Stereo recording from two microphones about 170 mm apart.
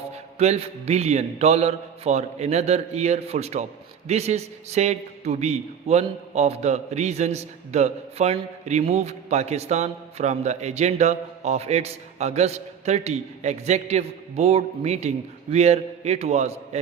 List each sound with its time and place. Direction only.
0.1 s a man's voice: 40° right (ahead or behind)